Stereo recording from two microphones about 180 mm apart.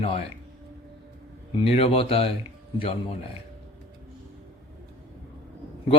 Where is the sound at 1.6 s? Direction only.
30° left (ahead or behind).